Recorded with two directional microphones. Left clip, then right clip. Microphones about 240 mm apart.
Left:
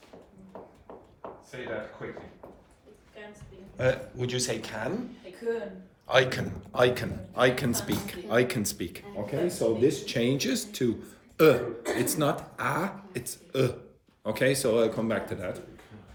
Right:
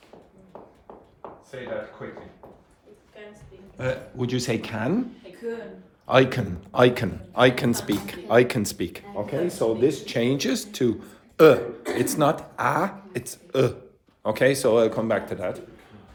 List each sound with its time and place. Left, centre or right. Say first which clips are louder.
3.8 s speech: left 2 dB; centre
4.1 s a man's voice: right 4 dB; centre
6.1 s a man's voice: right 4 dB; right